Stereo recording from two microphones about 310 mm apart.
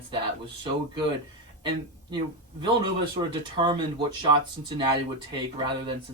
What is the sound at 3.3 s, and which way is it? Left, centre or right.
Speech, centre.